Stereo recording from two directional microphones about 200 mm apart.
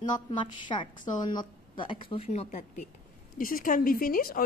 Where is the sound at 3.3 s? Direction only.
45° left (ahead or behind).